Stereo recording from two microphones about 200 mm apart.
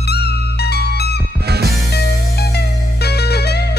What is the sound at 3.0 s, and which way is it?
Music, 55° left (ahead or behind).